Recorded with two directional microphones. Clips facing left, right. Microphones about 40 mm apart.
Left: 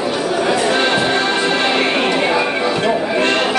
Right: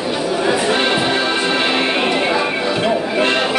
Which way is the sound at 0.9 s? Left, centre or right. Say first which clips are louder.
Left 1 dB; centre.